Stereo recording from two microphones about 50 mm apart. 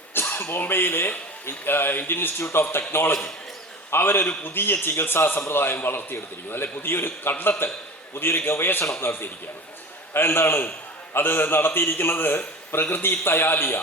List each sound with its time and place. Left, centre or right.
0.1 s a sound: left
0.6 s a man's voice: left
2.4 s a man's voice: left